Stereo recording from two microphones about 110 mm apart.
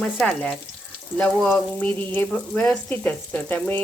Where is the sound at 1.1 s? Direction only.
10° left (ahead or behind).